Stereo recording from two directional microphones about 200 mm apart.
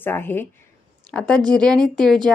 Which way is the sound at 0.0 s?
10° left (ahead or behind).